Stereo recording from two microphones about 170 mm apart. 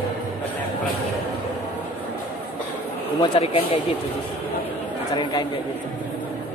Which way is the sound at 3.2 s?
35° left (ahead or behind).